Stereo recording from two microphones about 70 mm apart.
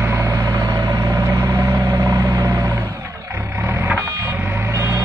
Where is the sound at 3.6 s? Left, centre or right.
Right.